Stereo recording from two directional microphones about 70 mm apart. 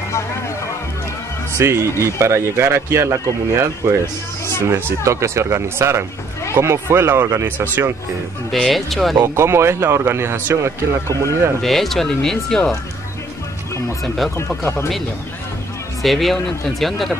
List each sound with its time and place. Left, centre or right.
1.6 s a man's voice: right
7.4 s a man's voice: right
8.5 s speech: centre
9.2 s a man's voice: right
11.6 s speech: centre
14.6 s speech: left
16.0 s speech: centre